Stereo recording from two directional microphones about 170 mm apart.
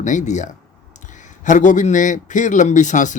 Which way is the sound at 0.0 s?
45° left (ahead or behind).